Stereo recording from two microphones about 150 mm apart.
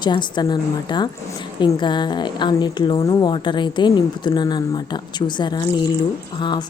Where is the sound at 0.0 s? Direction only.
30° left (ahead or behind).